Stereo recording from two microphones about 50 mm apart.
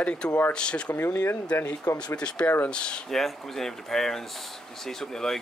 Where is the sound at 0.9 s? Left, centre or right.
Left.